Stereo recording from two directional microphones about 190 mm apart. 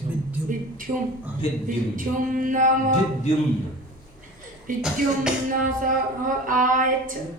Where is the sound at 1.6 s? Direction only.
45° right (ahead or behind).